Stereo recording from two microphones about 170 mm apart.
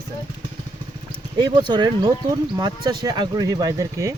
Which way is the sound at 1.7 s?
25° right (ahead or behind).